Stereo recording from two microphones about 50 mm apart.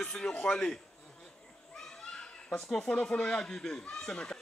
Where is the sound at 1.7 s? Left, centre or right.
Centre.